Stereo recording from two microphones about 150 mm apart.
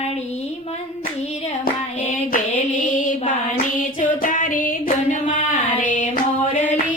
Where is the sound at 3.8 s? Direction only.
60° left (ahead or behind).